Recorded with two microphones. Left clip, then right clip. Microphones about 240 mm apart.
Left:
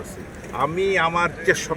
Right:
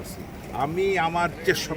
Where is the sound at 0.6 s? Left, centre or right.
Centre.